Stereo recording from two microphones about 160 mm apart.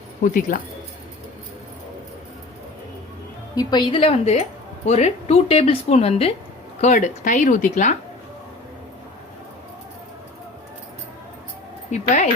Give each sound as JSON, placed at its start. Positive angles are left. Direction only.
{"t": 0.2, "sound": "speech", "side_deg": 55}
{"t": 3.5, "sound": "speech", "side_deg": 25}
{"t": 6.8, "sound": "speech", "side_deg": 50}
{"t": 11.9, "sound": "speech", "side_deg": 45}